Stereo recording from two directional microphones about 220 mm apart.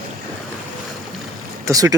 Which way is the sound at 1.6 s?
15° right (ahead or behind).